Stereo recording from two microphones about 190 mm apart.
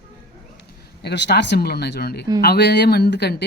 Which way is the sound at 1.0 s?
65° left (ahead or behind).